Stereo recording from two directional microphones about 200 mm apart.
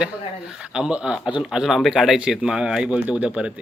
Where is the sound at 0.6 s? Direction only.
5° right (ahead or behind).